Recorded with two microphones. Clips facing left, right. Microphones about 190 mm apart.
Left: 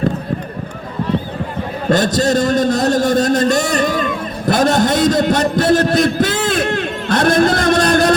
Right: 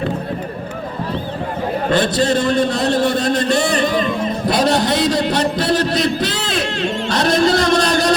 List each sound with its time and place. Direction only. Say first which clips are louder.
1.9 s a man's voice: left 3 dB; 40° left (ahead or behind)